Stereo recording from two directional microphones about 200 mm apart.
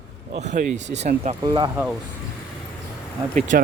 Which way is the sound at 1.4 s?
20° right (ahead or behind).